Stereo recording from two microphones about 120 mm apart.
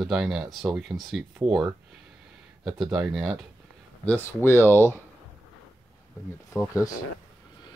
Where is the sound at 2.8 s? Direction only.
Centre (ahead or behind).